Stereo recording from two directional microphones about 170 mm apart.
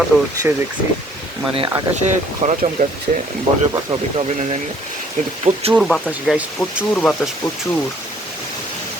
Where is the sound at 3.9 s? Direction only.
35° right (ahead or behind).